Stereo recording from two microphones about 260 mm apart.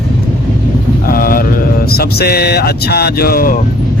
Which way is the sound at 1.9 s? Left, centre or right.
Left.